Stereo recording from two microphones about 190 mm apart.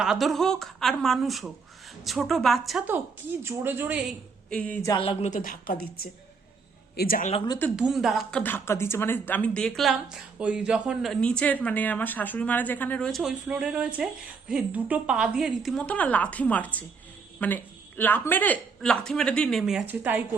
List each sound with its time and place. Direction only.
0.0 s speech: centre (ahead or behind)
4.4 s a sound: 5° left (ahead or behind)
4.9 s a woman's voice: 30° left (ahead or behind)
7.8 s speech: centre (ahead or behind)